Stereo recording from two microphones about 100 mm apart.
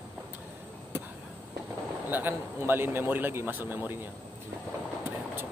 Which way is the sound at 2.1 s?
20° right (ahead or behind).